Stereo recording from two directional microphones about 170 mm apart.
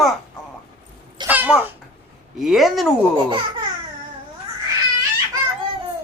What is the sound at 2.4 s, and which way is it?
Speech, centre (ahead or behind).